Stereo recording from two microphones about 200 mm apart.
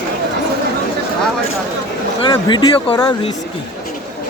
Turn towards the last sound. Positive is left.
turn(degrees=20)  # may be behind; listen again after turning